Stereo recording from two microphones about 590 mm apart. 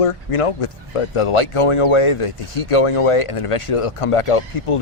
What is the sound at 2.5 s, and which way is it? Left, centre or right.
Speech, left.